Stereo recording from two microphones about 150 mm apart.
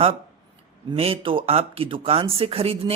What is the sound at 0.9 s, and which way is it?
Speech, 40° right (ahead or behind).